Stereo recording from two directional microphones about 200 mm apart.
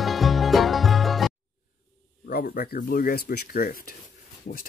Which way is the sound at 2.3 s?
50° left (ahead or behind).